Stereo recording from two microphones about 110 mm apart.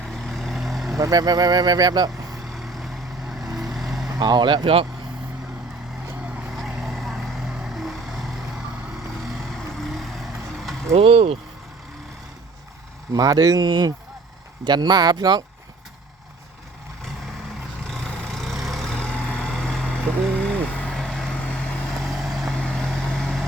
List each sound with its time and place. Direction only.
0.0 s vehicle: centre (ahead or behind)
0.9 s speech: 35° right (ahead or behind)
2.5 s vehicle: centre (ahead or behind)
4.2 s speech: 40° right (ahead or behind)
6.1 s vehicle: 15° right (ahead or behind)
6.5 s vehicle: 5° right (ahead or behind)
10.9 s speech: 65° right (ahead or behind)
13.1 s speech: 35° right (ahead or behind)
17.8 s vehicle: 5° left (ahead or behind)